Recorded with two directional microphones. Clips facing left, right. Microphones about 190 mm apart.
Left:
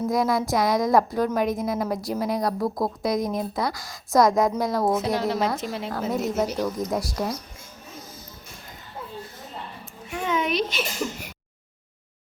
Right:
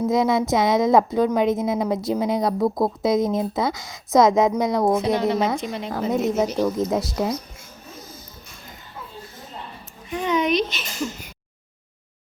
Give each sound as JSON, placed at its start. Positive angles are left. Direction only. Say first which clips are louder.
{"t": 0.1, "sound": "a woman's voice", "louder": "right 3 dB", "side_deg": -20}
{"t": 4.9, "sound": "a woman's voice", "louder": "right 3 dB", "side_deg": 0}
{"t": 6.6, "sound": "a woman's voice", "louder": "right 4 dB", "side_deg": -20}
{"t": 10.1, "sound": "speech", "louder": "right 4 dB", "side_deg": 0}